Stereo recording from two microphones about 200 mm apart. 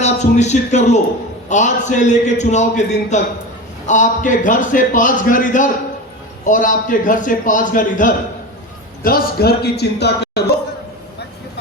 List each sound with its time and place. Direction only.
0.0 s a man's voice: 35° left (ahead or behind); by 10.4 s 55° left (ahead or behind)